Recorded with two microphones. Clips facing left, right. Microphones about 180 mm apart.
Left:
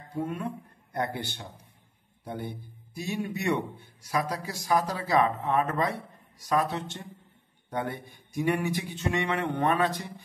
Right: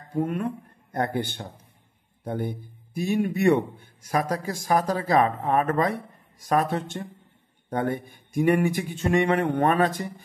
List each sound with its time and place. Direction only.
0.2 s a man's voice: 55° right (ahead or behind)